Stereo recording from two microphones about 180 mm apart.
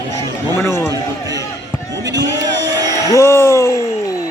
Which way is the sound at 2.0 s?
80° right.